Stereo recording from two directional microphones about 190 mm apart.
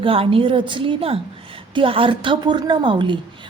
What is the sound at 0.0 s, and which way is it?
A woman's voice, 30° right (ahead or behind).